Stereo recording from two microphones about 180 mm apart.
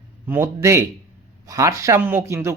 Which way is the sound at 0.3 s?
15° right (ahead or behind).